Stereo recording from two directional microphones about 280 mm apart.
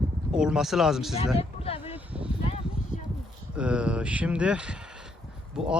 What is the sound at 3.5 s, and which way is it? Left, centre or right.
Speech, centre.